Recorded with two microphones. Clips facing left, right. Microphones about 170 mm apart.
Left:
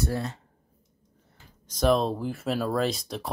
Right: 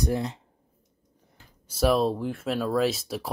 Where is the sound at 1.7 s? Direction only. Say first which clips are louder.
Right 1 dB; 5° right (ahead or behind).